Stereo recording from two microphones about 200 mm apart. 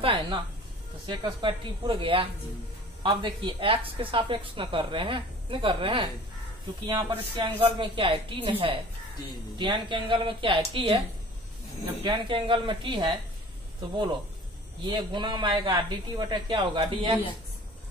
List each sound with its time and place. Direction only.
0.0 s a sound: 25° right (ahead or behind)
1.0 s a woman's voice: 25° right (ahead or behind)
12.0 s a woman's voice: 25° right (ahead or behind)
14.9 s a woman's voice: 20° right (ahead or behind)